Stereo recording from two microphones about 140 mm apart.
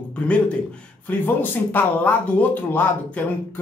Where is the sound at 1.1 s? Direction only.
10° left (ahead or behind).